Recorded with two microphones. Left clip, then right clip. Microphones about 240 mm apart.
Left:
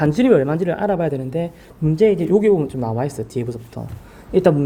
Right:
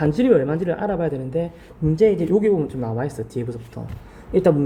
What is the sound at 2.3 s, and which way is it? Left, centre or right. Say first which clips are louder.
Speech: left 3 dB; left.